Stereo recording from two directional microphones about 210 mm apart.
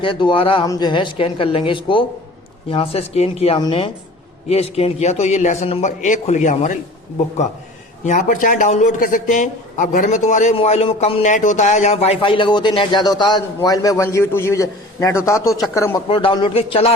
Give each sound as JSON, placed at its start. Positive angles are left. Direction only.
{"t": 0.0, "sound": "a man's voice", "side_deg": 25}
{"t": 8.0, "sound": "a man's voice", "side_deg": 35}
{"t": 16.0, "sound": "a man's voice", "side_deg": 25}